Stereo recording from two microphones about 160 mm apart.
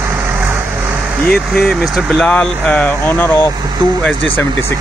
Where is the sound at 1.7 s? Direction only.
5° left (ahead or behind).